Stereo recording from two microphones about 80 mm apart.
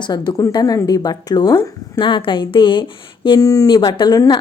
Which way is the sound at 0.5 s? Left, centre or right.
Left.